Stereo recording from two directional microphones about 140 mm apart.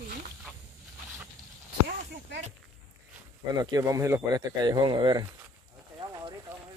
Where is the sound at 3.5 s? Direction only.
25° right (ahead or behind).